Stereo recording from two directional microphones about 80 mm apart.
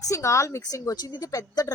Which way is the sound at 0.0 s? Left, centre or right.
Left.